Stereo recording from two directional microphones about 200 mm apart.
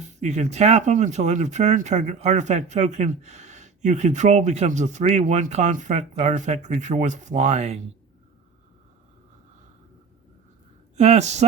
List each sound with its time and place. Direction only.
0.1 s speech: 35° right (ahead or behind)
10.9 s speech: 35° right (ahead or behind)